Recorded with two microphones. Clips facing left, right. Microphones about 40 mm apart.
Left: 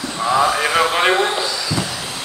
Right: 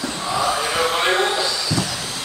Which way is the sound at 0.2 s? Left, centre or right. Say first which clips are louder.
Left 6 dB; left.